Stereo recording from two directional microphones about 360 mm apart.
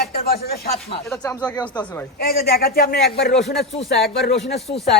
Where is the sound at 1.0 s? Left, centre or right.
Centre.